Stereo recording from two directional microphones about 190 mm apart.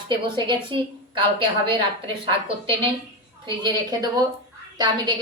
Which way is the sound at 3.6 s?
20° right (ahead or behind).